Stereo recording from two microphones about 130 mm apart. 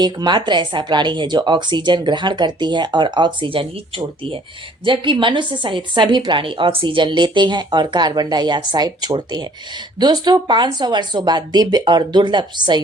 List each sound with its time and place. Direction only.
0.0 s a woman's voice: 35° right (ahead or behind)